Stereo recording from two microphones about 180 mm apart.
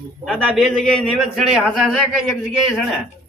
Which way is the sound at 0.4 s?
5° right (ahead or behind).